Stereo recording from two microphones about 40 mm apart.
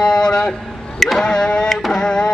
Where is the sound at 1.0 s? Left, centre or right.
Centre.